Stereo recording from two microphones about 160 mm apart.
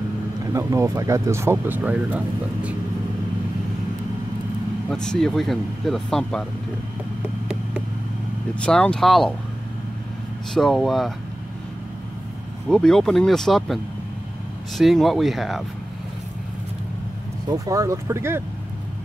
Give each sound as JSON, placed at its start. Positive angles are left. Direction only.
{"t": 0.5, "sound": "speech", "side_deg": -20}
{"t": 4.8, "sound": "speech", "side_deg": 5}
{"t": 8.5, "sound": "speech", "side_deg": 5}
{"t": 10.5, "sound": "speech", "side_deg": 0}
{"t": 12.6, "sound": "speech", "side_deg": 5}
{"t": 14.8, "sound": "speech", "side_deg": 0}
{"t": 17.5, "sound": "speech", "side_deg": -20}